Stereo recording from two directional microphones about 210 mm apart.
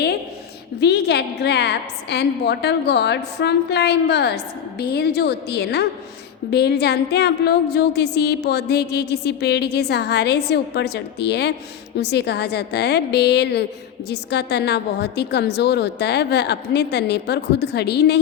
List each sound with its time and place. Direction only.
0.8 s a woman's voice: 50° left (ahead or behind)